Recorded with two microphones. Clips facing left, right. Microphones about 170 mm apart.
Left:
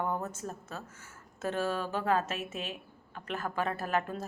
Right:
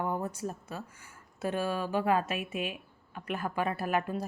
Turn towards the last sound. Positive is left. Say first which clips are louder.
# right 2 dB
turn(degrees=-10)  # may be behind; listen again after turning